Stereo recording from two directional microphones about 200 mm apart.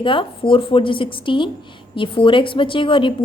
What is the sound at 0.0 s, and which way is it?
A woman's voice, 25° left (ahead or behind).